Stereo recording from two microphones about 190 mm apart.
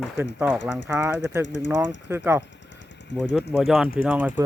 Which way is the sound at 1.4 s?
65° left (ahead or behind).